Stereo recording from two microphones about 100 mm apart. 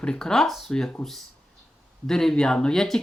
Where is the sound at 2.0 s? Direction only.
5° left (ahead or behind).